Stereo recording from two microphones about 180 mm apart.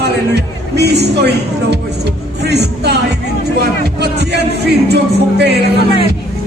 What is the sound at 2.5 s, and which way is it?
Speech, 65° right (ahead or behind).